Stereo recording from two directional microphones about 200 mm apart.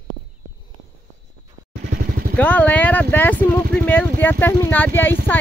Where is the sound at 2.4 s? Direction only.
10° left (ahead or behind).